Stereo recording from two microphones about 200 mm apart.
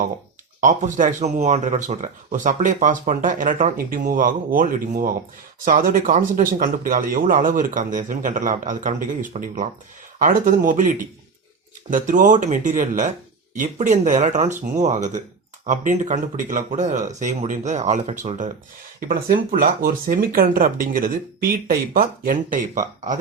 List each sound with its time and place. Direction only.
0.6 s speech: 40° right (ahead or behind)